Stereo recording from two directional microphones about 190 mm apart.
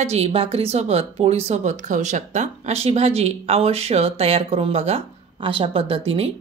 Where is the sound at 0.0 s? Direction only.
30° right (ahead or behind).